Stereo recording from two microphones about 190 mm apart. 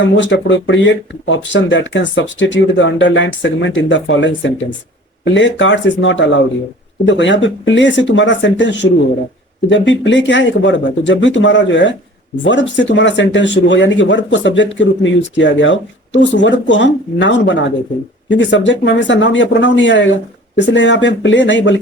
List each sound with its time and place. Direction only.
0.0 s speech: 75° left (ahead or behind)